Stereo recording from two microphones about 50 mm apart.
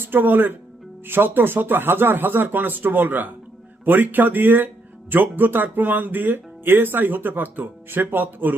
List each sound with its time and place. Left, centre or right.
0.0 s speech: right